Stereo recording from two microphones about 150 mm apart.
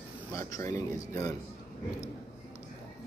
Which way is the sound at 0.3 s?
20° left (ahead or behind).